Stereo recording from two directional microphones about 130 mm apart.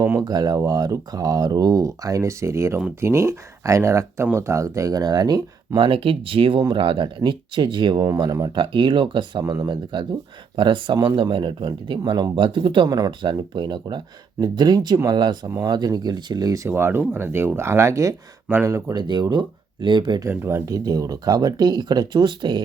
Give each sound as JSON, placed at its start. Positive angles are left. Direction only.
{"t": 0.2, "sound": "speech", "side_deg": -30}
{"t": 6.6, "sound": "speech", "side_deg": -35}
{"t": 8.0, "sound": "speech", "side_deg": -25}
{"t": 9.4, "sound": "speech", "side_deg": -25}
{"t": 16.6, "sound": "speech", "side_deg": -15}
{"t": 19.0, "sound": "speech", "side_deg": -35}
{"t": 20.2, "sound": "speech", "side_deg": -20}